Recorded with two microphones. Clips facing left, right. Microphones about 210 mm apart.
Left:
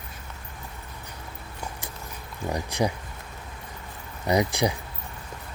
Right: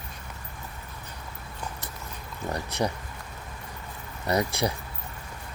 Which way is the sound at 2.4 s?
10° left (ahead or behind).